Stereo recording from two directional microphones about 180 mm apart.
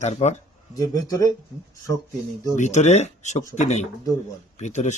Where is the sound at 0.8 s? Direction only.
20° left (ahead or behind).